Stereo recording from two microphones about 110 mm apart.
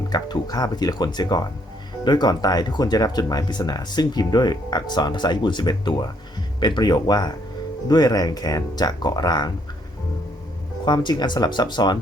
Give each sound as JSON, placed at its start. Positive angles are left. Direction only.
{"t": 0.1, "sound": "speech", "side_deg": 35}
{"t": 10.8, "sound": "speech", "side_deg": 40}